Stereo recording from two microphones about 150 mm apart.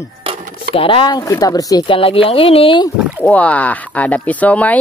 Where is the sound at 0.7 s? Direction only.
35° left (ahead or behind).